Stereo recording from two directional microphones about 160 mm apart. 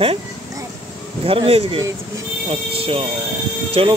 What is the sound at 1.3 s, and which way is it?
Speech, 35° right (ahead or behind).